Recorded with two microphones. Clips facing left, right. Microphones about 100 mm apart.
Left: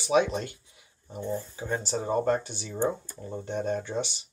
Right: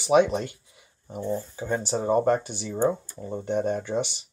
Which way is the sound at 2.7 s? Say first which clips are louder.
Right 4 dB; 20° right (ahead or behind).